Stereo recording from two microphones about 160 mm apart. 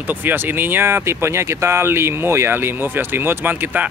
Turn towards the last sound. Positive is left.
turn(degrees=-10)  # may be behind; listen again after turning